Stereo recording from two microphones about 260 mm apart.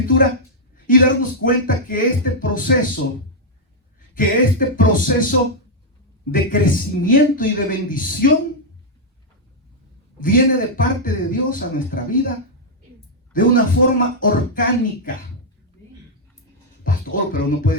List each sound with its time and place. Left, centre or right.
0.0 s a woman's voice: left
4.1 s a man's voice: left
6.3 s a man's voice: left
10.2 s a man's voice: left
13.3 s a man's voice: left
16.8 s music: left